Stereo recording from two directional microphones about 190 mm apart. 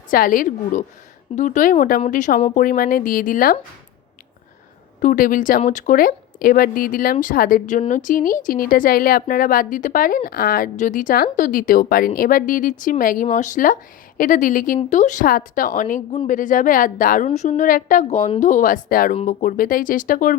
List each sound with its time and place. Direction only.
0.1 s speech: 45° left (ahead or behind)
4.9 s speech: 45° left (ahead or behind)